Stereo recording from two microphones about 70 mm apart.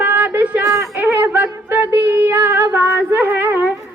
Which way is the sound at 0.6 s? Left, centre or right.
Right.